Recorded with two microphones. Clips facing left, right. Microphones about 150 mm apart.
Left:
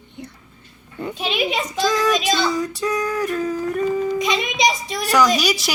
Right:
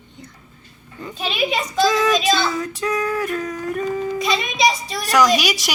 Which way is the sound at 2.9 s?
10° left (ahead or behind).